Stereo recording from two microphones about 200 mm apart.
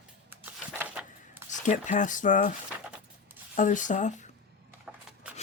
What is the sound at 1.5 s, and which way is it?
Speech, 40° left (ahead or behind).